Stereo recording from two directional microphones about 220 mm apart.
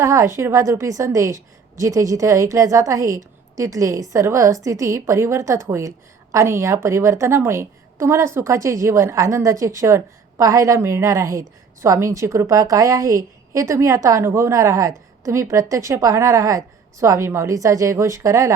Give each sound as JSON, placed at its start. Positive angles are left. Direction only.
{"t": 0.0, "sound": "a woman's voice", "side_deg": -15}